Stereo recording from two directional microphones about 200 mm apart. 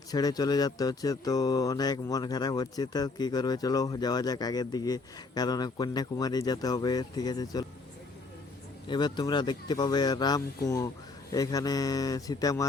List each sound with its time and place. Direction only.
0.1 s speech: 20° left (ahead or behind)
8.9 s speech: 20° left (ahead or behind)